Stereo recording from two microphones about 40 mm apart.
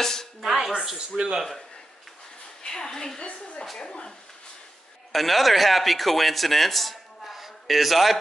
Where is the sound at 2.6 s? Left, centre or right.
Centre.